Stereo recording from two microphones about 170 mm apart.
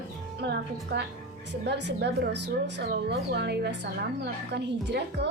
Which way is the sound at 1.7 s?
85° right.